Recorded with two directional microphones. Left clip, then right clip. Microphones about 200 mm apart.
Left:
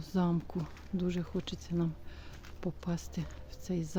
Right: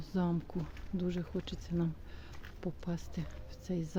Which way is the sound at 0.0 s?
15° left (ahead or behind).